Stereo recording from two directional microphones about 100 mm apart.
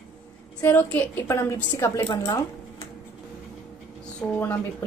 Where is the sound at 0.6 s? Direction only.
20° left (ahead or behind).